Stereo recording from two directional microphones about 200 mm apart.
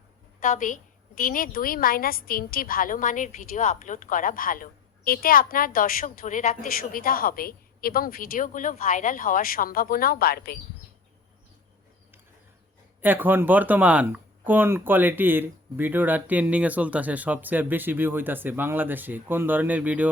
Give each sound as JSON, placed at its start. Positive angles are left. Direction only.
{"t": 0.3, "sound": "a woman's voice", "side_deg": 40}
{"t": 13.0, "sound": "speech", "side_deg": -10}